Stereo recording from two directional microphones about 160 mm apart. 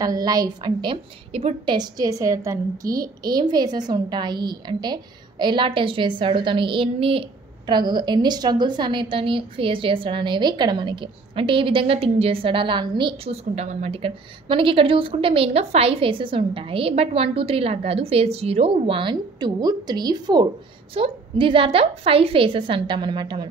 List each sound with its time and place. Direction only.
0.0 s a woman's voice: 25° right (ahead or behind)